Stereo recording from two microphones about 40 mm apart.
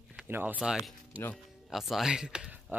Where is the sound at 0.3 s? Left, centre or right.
Right.